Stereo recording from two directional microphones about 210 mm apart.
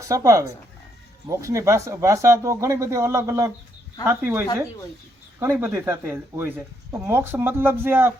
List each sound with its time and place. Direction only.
0.0 s speech: 15° right (ahead or behind)